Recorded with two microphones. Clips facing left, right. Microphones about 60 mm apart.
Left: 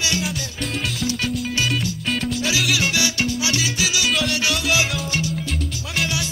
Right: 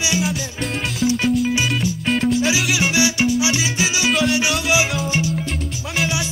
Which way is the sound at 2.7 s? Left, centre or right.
Right.